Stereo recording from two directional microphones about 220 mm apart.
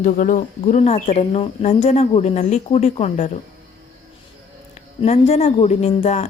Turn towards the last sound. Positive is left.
turn(degrees=30)  # may be behind; listen again after turning